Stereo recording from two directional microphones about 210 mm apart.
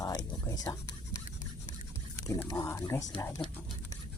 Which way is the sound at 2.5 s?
15° left (ahead or behind).